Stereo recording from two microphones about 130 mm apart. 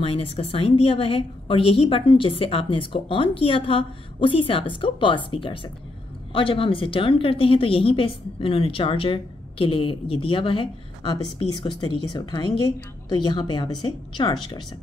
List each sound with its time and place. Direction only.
0.0 s speech: 45° left (ahead or behind)